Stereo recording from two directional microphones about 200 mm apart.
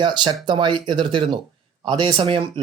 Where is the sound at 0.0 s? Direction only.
25° right (ahead or behind).